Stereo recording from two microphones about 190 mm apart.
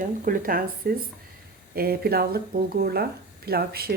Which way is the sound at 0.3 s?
50° right (ahead or behind).